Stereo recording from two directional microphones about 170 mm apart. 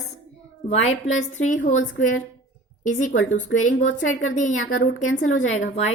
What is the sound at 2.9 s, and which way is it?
A woman's voice, 50° left (ahead or behind).